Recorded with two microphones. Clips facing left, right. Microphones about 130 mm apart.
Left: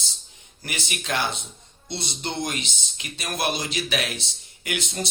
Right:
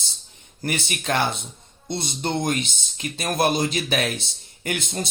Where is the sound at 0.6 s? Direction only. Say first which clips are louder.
Right 6 dB; 50° right (ahead or behind).